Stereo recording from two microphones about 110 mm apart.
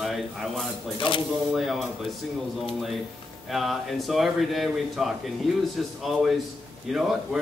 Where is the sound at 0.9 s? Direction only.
50° left (ahead or behind).